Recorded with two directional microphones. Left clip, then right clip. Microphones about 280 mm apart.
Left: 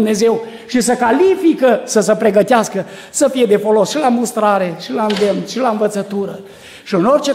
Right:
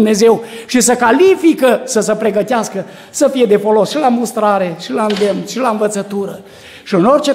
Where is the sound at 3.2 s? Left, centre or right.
Centre.